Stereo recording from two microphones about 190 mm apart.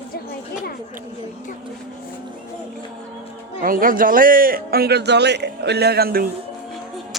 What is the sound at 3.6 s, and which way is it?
Speech, 50° right (ahead or behind).